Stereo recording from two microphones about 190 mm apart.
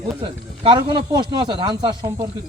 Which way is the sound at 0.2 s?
25° right (ahead or behind).